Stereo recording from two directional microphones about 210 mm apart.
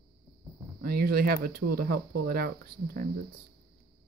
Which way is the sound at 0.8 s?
45° right (ahead or behind).